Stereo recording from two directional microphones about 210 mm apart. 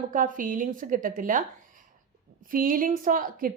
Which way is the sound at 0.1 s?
40° right (ahead or behind).